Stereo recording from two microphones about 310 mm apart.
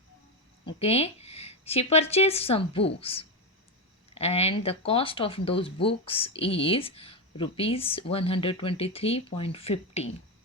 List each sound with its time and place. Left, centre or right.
0.8 s speech: centre